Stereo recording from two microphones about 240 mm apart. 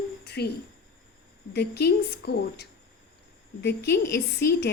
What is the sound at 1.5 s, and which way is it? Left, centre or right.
A woman's voice, left.